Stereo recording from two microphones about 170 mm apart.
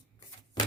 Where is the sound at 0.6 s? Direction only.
25° left (ahead or behind).